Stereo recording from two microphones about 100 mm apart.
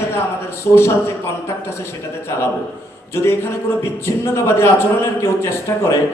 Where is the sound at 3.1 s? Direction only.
25° left (ahead or behind).